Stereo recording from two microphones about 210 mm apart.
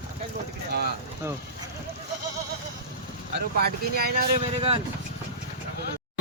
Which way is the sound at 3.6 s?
45° right (ahead or behind).